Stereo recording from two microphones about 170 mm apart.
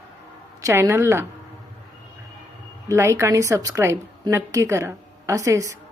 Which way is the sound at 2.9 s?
15° right (ahead or behind).